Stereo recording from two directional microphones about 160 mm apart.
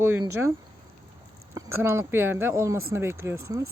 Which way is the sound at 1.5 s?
15° right (ahead or behind).